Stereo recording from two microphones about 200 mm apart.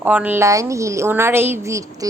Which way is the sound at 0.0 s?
10° right (ahead or behind).